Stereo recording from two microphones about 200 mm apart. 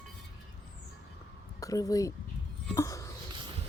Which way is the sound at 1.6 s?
20° left (ahead or behind).